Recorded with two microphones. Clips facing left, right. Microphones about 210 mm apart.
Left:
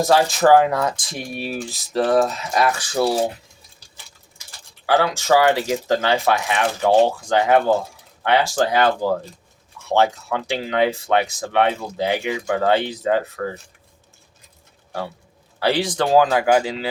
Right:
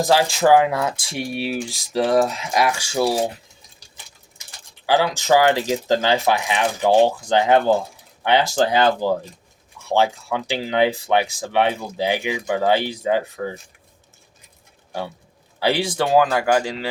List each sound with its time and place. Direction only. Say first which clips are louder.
0.3 s speech: left 1 dB; 10° right (ahead or behind)
4.9 s speech: even; 15° right (ahead or behind)
9.9 s speech: left 1 dB; 15° right (ahead or behind)
15.6 s speech: left 1 dB; 10° right (ahead or behind)